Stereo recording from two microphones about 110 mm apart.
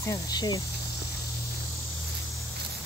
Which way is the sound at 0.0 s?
35° left (ahead or behind).